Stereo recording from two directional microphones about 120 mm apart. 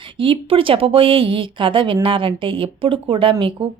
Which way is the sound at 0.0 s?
45° right (ahead or behind).